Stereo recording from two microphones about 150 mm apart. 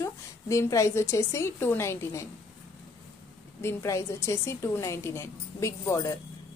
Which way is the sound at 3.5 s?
20° left (ahead or behind).